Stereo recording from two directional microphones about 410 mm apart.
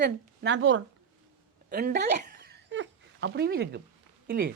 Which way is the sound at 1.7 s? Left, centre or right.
Right.